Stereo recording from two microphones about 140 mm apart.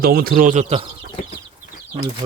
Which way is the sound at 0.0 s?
90° right.